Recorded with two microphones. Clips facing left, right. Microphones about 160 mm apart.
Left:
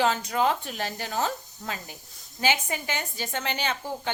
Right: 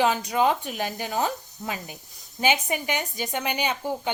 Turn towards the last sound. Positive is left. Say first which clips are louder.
# right 3 dB
turn(degrees=-15)  # may be behind; listen again after turning